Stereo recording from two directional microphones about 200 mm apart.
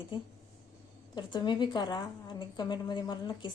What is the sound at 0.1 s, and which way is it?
A woman's voice, 25° left (ahead or behind).